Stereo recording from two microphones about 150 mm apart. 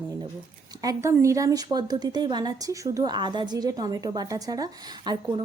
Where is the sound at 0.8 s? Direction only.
20° right (ahead or behind).